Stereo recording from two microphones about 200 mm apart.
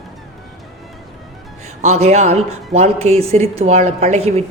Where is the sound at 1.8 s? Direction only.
35° right (ahead or behind).